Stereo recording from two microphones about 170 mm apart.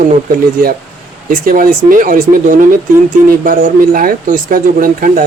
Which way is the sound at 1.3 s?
55° right (ahead or behind).